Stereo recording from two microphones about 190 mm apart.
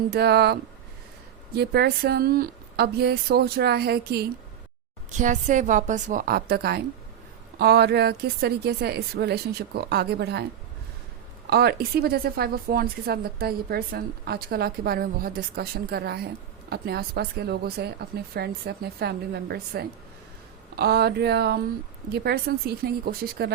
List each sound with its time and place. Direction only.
0.1 s a woman's voice: 60° right (ahead or behind)
5.1 s a woman's voice: 40° right (ahead or behind); by 10.4 s 60° right (ahead or behind)
11.4 s a woman's voice: 55° right (ahead or behind)